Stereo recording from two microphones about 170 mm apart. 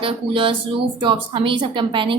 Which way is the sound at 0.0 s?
30° right (ahead or behind).